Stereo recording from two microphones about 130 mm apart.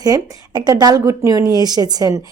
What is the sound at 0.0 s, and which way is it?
Speech, 30° right (ahead or behind).